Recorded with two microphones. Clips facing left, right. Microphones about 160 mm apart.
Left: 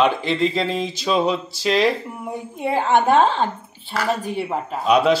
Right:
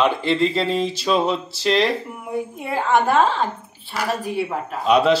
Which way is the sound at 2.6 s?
30° left (ahead or behind).